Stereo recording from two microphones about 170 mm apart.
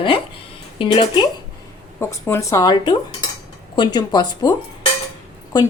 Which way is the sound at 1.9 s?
15° left (ahead or behind).